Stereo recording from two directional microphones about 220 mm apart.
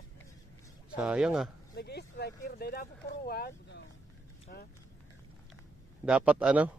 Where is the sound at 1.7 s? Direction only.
45° left (ahead or behind).